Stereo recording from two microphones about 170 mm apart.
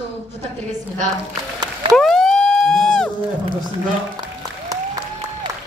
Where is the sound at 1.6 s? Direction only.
25° right (ahead or behind).